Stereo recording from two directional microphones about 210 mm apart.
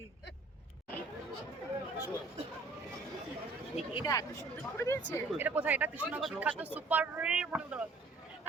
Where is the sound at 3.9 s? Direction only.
15° left (ahead or behind).